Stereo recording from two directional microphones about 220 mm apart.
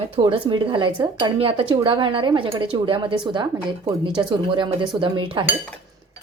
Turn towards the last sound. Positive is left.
turn(degrees=-25)  # may be behind; listen again after turning